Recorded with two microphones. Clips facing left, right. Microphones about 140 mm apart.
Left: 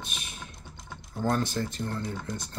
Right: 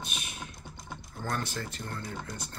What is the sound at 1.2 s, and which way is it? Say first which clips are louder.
Speech: left 7 dB; 25° left (ahead or behind).